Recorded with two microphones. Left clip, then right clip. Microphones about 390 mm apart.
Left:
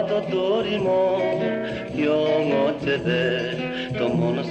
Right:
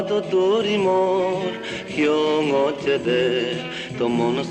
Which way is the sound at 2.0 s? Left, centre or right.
Centre.